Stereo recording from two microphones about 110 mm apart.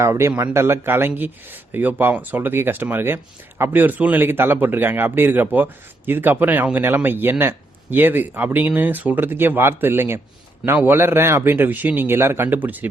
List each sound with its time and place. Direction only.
0.0 s a man's voice: 25° right (ahead or behind)